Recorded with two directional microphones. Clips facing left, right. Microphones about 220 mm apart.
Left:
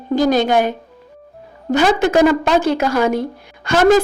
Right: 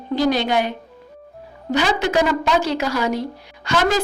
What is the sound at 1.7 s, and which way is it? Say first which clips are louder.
A woman's voice: left 5 dB; 50° left (ahead or behind).